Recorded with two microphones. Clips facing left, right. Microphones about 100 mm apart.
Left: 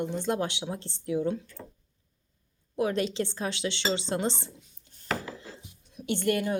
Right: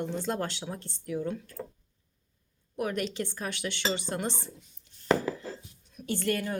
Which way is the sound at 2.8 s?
25° left (ahead or behind).